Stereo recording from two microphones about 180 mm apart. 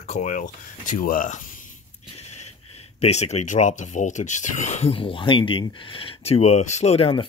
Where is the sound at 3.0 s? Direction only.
40° left (ahead or behind).